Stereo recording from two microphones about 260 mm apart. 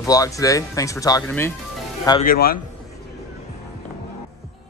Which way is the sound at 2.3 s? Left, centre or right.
Left.